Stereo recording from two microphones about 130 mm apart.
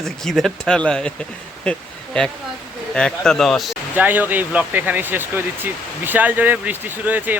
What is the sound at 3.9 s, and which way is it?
Speech, 15° right (ahead or behind).